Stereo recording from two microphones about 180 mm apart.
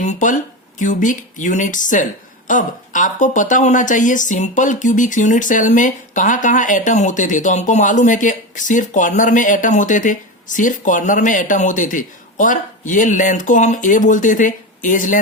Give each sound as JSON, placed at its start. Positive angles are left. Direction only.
{"t": 0.0, "sound": "a woman's voice", "side_deg": 45}